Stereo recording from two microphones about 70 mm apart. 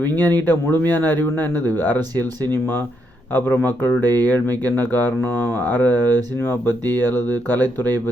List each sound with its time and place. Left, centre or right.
0.0 s speech: left